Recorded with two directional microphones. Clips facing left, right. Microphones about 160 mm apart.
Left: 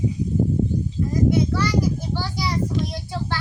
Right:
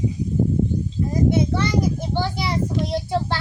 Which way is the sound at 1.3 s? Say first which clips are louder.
Right 1 dB; 25° right (ahead or behind).